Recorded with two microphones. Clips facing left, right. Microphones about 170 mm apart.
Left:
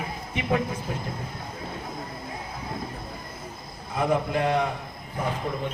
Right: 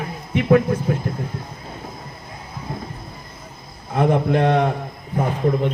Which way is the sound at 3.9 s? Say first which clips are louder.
Right 7 dB; 65° right (ahead or behind).